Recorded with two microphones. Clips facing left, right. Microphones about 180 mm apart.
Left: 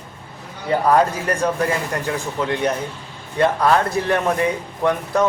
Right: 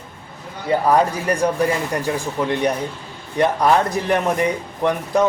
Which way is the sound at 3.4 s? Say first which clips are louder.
Even; 15° right (ahead or behind).